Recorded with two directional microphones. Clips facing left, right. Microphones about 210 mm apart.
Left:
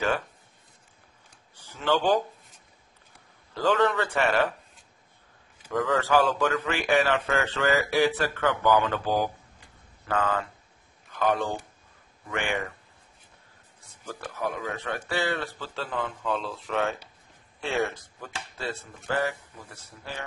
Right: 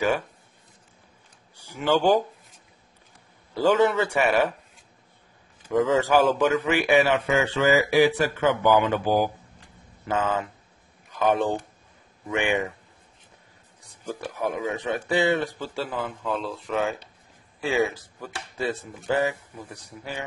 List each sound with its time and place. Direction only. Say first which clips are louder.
1.6 s speech: right 3 dB; 15° right (ahead or behind)
3.5 s speech: right 4 dB; 15° right (ahead or behind)
5.7 s speech: right 4 dB; 20° right (ahead or behind)
13.8 s speech: right 5 dB; 15° right (ahead or behind)
18.6 s speech: right 7 dB; 15° right (ahead or behind)